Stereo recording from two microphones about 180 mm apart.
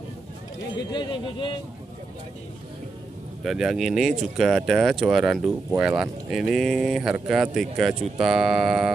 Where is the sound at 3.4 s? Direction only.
Centre (ahead or behind).